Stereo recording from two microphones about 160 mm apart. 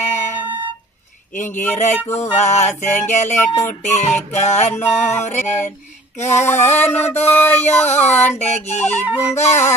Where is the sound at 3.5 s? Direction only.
15° left (ahead or behind).